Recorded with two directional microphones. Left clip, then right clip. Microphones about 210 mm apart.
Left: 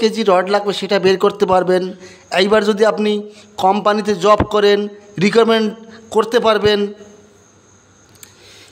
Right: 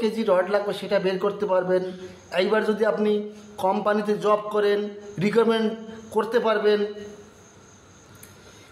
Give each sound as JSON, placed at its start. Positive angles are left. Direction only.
{"t": 0.0, "sound": "a man's voice", "side_deg": 50}